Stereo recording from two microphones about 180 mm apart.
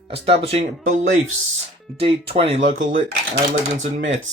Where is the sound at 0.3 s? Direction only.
35° right (ahead or behind).